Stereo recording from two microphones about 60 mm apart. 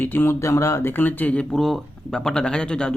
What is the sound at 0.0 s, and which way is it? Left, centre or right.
Speech, left.